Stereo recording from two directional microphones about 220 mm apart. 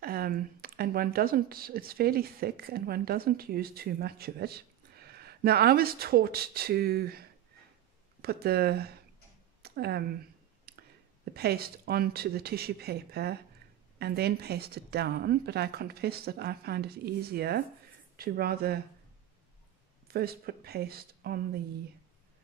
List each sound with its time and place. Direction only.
0.0 s speech: 45° right (ahead or behind)
10.7 s a sound: 45° right (ahead or behind)
11.3 s speech: 45° right (ahead or behind)
20.1 s speech: 45° right (ahead or behind)